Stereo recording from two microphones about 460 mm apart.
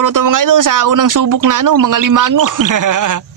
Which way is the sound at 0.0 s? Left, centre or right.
Right.